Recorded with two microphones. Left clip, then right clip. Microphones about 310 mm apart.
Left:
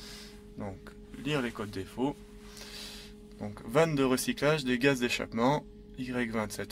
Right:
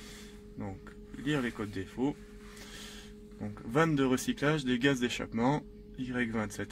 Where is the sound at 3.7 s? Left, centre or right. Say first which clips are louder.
Left 2 dB; left.